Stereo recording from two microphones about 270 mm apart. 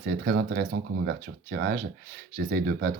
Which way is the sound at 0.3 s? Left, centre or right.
Right.